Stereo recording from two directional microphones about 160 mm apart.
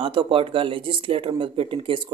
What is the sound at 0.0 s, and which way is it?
Speech, 35° right (ahead or behind).